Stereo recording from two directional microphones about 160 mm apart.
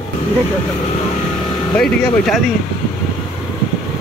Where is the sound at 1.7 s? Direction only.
Centre (ahead or behind).